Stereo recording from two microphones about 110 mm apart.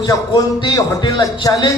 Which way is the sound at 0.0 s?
35° left (ahead or behind).